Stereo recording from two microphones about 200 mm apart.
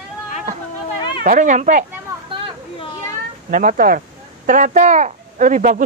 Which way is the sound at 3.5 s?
40° right (ahead or behind).